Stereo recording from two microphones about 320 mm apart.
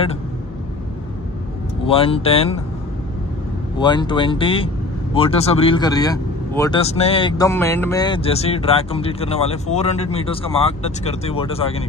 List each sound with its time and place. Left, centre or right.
1.9 s speech: centre
3.7 s speech: centre